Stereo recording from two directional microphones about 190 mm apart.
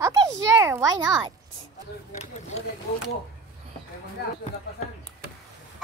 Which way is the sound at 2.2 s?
35° left (ahead or behind).